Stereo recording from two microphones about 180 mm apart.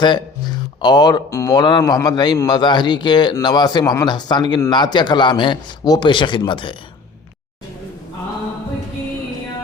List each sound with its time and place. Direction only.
0.0 s speech: 25° left (ahead or behind)